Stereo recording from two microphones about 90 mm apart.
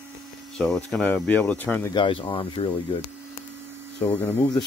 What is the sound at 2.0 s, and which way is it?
Speech, 65° left (ahead or behind).